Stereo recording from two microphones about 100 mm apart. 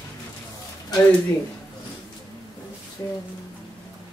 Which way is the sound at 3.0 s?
40° left (ahead or behind).